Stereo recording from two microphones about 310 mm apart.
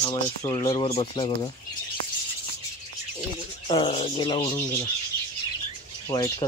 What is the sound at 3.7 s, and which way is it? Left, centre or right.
Speech, centre.